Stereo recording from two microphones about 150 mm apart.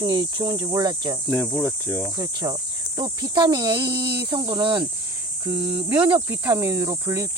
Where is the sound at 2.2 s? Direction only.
25° right (ahead or behind).